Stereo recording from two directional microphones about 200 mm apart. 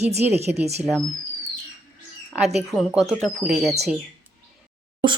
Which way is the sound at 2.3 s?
Centre (ahead or behind).